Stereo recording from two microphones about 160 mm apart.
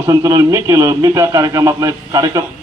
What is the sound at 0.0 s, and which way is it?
A man's voice, 20° right (ahead or behind).